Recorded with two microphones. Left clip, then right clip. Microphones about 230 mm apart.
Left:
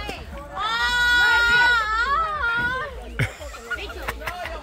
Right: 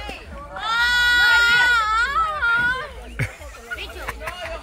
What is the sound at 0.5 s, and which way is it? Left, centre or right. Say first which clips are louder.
Goat: right 3 dB; right.